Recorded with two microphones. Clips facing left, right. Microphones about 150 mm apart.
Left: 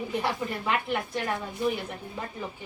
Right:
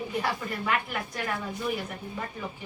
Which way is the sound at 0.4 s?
20° left (ahead or behind).